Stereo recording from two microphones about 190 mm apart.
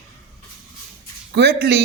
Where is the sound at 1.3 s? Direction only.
60° right (ahead or behind).